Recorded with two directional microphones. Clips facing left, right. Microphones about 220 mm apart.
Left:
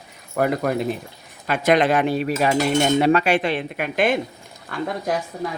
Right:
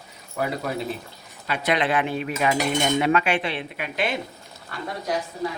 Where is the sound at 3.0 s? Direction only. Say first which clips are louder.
Left 4 dB; 35° left (ahead or behind).